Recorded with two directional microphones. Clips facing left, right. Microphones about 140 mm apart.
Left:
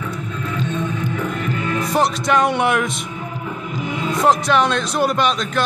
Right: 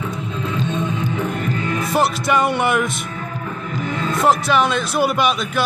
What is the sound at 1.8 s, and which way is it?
Speech, 5° right (ahead or behind).